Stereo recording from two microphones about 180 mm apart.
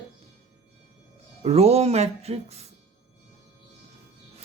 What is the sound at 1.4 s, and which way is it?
Speech, 35° right (ahead or behind).